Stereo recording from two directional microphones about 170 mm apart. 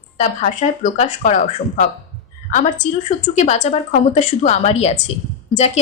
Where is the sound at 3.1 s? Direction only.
40° left (ahead or behind).